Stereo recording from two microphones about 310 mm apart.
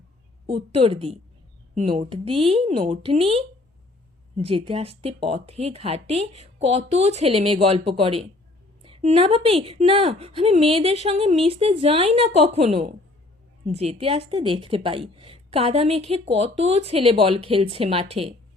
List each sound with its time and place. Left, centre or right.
0.4 s speech: centre